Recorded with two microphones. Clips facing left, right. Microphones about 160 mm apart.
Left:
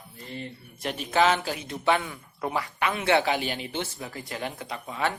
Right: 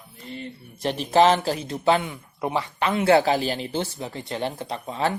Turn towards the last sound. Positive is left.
turn(degrees=-30)  # may be behind; listen again after turning